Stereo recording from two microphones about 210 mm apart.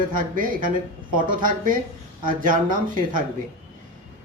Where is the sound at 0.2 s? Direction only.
40° right (ahead or behind).